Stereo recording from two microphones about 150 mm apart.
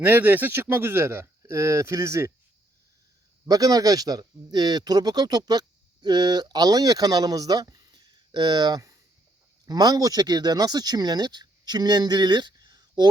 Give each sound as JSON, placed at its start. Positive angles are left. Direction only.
{"t": 0.0, "sound": "speech", "side_deg": -10}
{"t": 3.4, "sound": "speech", "side_deg": -25}